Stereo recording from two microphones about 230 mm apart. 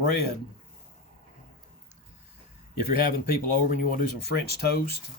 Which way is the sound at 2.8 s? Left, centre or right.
Left.